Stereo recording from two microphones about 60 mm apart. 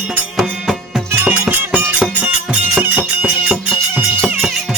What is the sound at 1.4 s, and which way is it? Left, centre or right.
Music, right.